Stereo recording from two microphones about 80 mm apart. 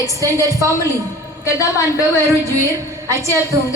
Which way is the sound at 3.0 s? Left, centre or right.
Right.